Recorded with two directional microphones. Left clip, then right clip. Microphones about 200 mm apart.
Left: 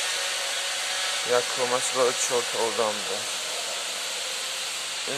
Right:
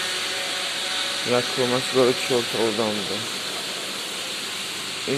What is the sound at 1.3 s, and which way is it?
Speech, 10° left (ahead or behind).